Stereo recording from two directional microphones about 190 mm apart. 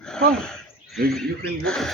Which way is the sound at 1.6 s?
Centre (ahead or behind).